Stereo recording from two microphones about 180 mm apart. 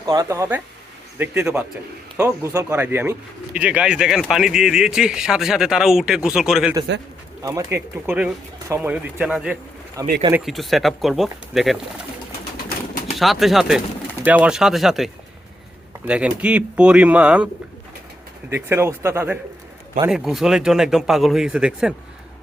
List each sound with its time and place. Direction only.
0.0 s speech: 20° right (ahead or behind); by 6.7 s 5° right (ahead or behind)
7.4 s speech: 15° right (ahead or behind)
10.0 s speech: 20° right (ahead or behind)
10.3 s speech: centre (ahead or behind)
12.6 s bird: 45° left (ahead or behind)
13.1 s speech: centre (ahead or behind)
18.5 s speech: 15° right (ahead or behind)
20.1 s speech: centre (ahead or behind)